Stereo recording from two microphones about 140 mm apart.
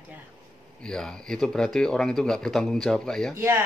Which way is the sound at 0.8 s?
5° left (ahead or behind).